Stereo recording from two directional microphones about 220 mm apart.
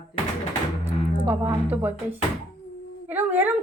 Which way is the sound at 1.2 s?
10° right (ahead or behind).